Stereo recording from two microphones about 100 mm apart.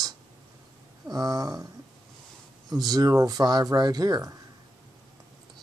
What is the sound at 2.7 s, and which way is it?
Speech, 40° right (ahead or behind).